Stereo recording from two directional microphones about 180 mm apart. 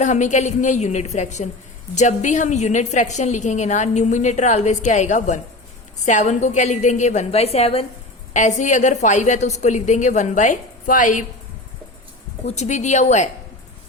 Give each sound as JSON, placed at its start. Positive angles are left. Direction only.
{"t": 0.0, "sound": "a woman's voice", "side_deg": 40}
{"t": 12.5, "sound": "a woman's voice", "side_deg": 40}